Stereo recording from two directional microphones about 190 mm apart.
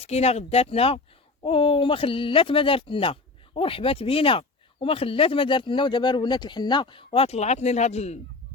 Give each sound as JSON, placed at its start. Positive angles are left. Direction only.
{"t": 0.0, "sound": "speech", "side_deg": 35}